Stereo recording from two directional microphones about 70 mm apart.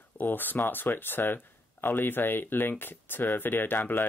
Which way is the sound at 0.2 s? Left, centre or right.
Left.